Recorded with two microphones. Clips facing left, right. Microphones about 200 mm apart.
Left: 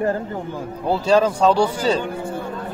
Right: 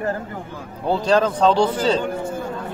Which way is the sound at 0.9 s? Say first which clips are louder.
Left 1 dB; 10° left (ahead or behind).